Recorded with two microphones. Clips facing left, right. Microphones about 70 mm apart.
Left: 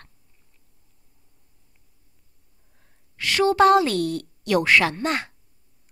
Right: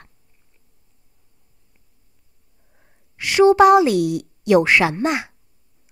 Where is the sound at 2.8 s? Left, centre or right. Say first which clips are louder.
Right 1 dB; centre.